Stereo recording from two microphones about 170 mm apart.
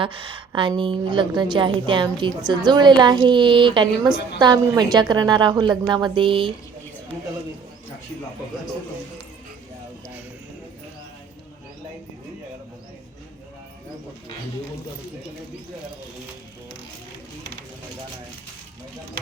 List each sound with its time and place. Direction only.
0.0 s a woman's voice: 30° right (ahead or behind)